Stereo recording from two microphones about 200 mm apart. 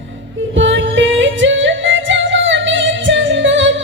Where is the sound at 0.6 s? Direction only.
65° right (ahead or behind).